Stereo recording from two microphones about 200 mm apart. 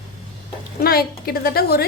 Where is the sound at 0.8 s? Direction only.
50° left (ahead or behind).